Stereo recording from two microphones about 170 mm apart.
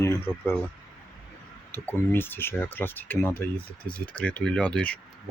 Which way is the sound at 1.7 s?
10° left (ahead or behind).